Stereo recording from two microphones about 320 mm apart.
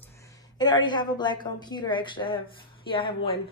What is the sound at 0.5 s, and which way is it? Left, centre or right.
Speech, centre.